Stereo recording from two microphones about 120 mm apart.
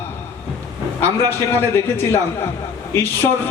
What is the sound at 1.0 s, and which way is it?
A man's voice, 20° left (ahead or behind).